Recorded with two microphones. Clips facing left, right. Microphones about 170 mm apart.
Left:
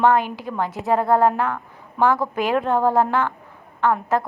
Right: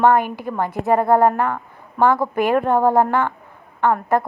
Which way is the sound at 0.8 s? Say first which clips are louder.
Right 2 dB; 15° right (ahead or behind).